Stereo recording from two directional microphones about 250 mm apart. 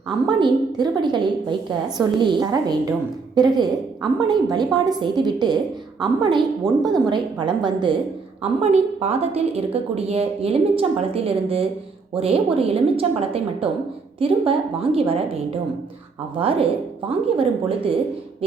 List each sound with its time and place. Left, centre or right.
0.3 s a woman's voice: centre
16.4 s a woman's voice: right